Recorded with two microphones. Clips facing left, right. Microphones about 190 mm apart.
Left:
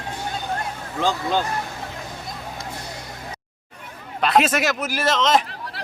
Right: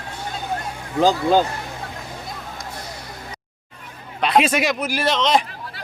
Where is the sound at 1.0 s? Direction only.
40° right (ahead or behind).